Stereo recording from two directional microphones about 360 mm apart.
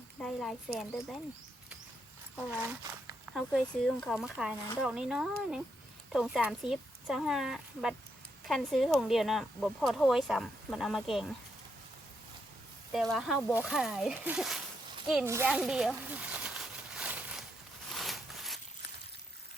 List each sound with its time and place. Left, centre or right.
0.2 s speech: centre
2.5 s speech: centre
12.9 s speech: centre
15.0 s a sound: centre